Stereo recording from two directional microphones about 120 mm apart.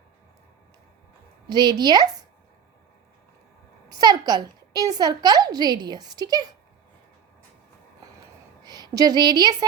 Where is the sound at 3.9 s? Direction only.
35° right (ahead or behind).